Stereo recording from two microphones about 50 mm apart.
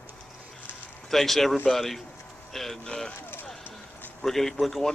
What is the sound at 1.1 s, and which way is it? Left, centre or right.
Speech, centre.